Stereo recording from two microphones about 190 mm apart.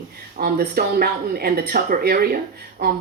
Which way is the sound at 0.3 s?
55° right (ahead or behind).